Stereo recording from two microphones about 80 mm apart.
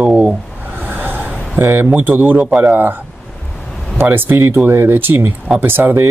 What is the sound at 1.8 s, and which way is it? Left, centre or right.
Speech, right.